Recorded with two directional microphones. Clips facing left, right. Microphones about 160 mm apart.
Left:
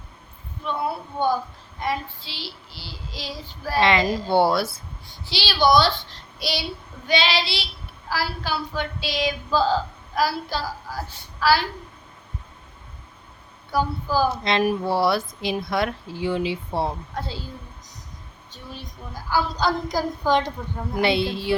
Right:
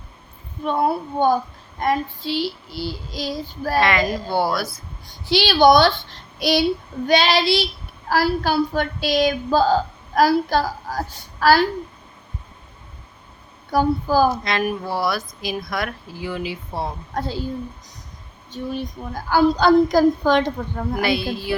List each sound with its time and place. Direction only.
0.6 s speech: 45° right (ahead or behind)
3.8 s speech: 25° left (ahead or behind)
5.3 s speech: 50° right (ahead or behind)
13.7 s speech: 45° right (ahead or behind)
14.4 s speech: 30° left (ahead or behind)
17.2 s speech: 50° right (ahead or behind)
18.5 s a woman's voice: 55° right (ahead or behind); by 21.0 s 70° right (ahead or behind)
21.0 s speech: 25° left (ahead or behind)